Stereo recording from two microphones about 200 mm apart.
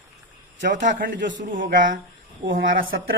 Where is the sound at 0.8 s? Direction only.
40° right (ahead or behind).